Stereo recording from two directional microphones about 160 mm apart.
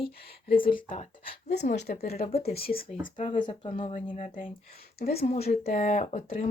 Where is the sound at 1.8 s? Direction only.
80° left.